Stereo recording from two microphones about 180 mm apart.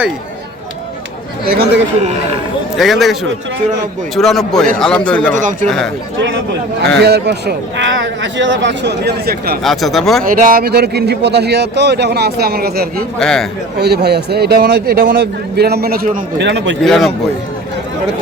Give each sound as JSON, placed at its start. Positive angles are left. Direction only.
{"t": 1.5, "sound": "a man's voice", "side_deg": -60}
{"t": 2.7, "sound": "a man's voice", "side_deg": 0}
{"t": 5.3, "sound": "speech", "side_deg": -45}
{"t": 5.6, "sound": "speech", "side_deg": 5}
{"t": 6.1, "sound": "speech", "side_deg": -90}
{"t": 7.0, "sound": "a man's voice", "side_deg": -65}
{"t": 9.6, "sound": "speech", "side_deg": 0}
{"t": 10.4, "sound": "a man's voice", "side_deg": -55}
{"t": 13.1, "sound": "speech", "side_deg": 5}
{"t": 13.7, "sound": "a man's voice", "side_deg": -65}
{"t": 16.8, "sound": "speech", "side_deg": 0}